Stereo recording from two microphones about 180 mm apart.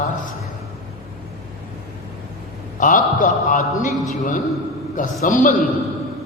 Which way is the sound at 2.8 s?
45° left (ahead or behind).